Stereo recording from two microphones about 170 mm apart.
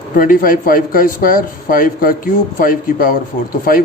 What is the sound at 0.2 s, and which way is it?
Speech, 55° left (ahead or behind).